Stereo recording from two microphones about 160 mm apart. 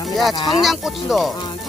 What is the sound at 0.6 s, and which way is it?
Speech, centre (ahead or behind).